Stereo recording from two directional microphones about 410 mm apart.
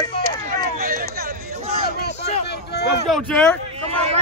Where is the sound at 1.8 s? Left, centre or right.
Left.